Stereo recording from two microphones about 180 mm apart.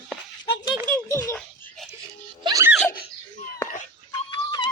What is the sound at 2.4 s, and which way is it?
Music, 20° right (ahead or behind).